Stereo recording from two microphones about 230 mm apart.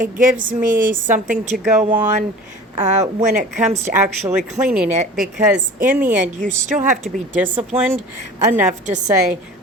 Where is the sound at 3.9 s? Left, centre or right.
Centre.